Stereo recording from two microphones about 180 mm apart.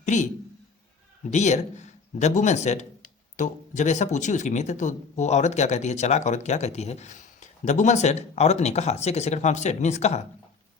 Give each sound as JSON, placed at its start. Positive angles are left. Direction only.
{"t": 0.0, "sound": "a man's voice", "side_deg": 40}
{"t": 1.3, "sound": "speech", "side_deg": 40}